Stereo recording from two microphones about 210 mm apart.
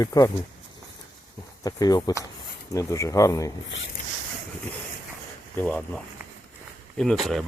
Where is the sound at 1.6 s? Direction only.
15° left (ahead or behind).